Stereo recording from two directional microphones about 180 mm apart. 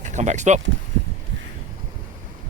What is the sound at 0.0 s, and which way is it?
Speech, 40° right (ahead or behind).